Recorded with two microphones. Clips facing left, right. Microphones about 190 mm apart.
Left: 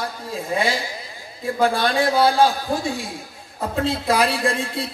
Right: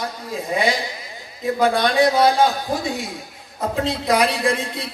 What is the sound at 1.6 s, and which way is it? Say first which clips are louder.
A woman's voice: right 2 dB; 20° right (ahead or behind).